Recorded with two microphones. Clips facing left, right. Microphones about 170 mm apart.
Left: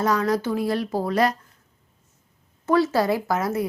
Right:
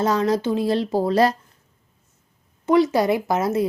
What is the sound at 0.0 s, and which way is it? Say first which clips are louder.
A woman's voice: right 2 dB; 25° right (ahead or behind).